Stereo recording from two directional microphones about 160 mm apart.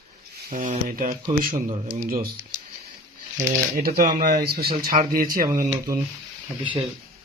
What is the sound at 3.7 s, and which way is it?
Speech, 70° right (ahead or behind).